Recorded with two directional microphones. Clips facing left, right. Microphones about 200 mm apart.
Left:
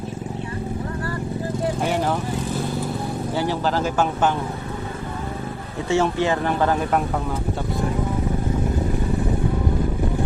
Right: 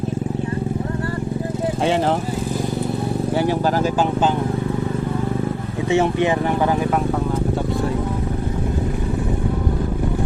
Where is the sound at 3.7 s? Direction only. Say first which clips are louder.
Right 3 dB; 15° right (ahead or behind).